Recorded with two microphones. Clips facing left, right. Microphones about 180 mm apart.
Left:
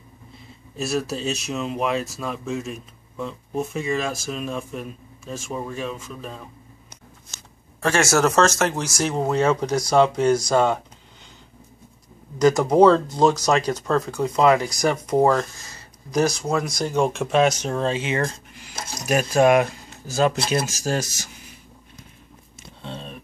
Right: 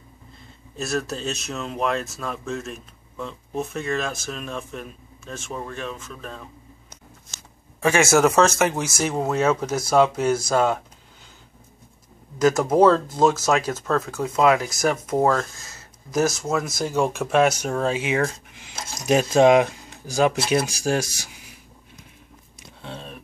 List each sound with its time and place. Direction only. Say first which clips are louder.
0.7 s speech: left 2 dB; 5° left (ahead or behind)
7.8 s speech: right 2 dB; 5° right (ahead or behind)
12.4 s speech: left 2 dB; 5° right (ahead or behind)
19.0 s speech: right 2 dB; 20° right (ahead or behind)
22.8 s a sound: left 1 dB; 5° right (ahead or behind)